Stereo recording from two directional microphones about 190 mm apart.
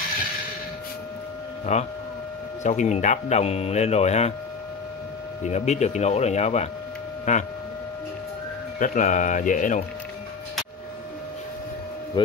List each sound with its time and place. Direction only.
1.7 s speech: 35° left (ahead or behind)
5.4 s speech: 35° left (ahead or behind)
8.7 s speech: 45° left (ahead or behind)